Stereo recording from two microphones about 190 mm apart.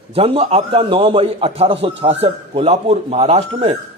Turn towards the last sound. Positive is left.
turn(degrees=-30)  # may be behind; listen again after turning